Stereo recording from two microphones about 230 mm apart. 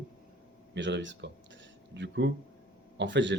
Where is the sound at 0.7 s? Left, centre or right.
Right.